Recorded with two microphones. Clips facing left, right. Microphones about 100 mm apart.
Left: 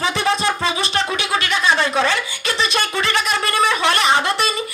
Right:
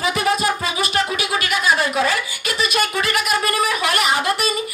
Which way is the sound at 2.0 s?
30° left (ahead or behind).